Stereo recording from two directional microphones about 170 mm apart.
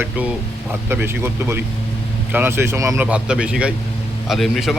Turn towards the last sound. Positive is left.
turn(degrees=0)  # may be behind; listen again after turning